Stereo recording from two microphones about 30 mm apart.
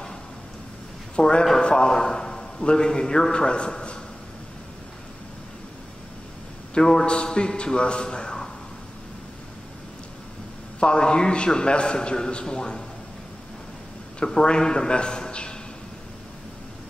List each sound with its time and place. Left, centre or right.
1.2 s a man's voice: left
6.7 s a man's voice: left
10.8 s a man's voice: left
14.2 s a man's voice: left